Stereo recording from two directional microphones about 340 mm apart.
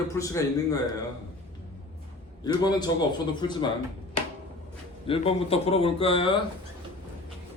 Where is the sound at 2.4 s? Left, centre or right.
Centre.